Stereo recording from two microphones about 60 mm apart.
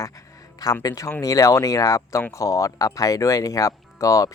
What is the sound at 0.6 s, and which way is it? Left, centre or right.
Speech, left.